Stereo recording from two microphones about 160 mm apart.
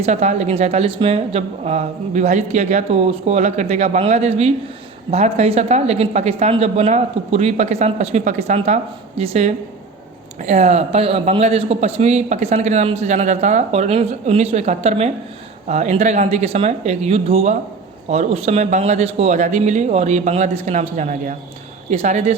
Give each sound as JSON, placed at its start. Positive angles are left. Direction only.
{"t": 0.0, "sound": "a man's voice", "side_deg": -45}